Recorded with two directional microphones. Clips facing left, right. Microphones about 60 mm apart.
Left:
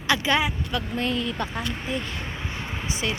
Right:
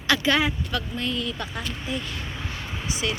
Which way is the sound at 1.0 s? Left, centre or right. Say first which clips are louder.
Left 2 dB; left.